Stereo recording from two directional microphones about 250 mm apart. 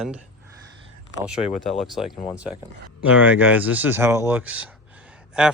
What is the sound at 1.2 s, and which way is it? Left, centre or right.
Speech, centre.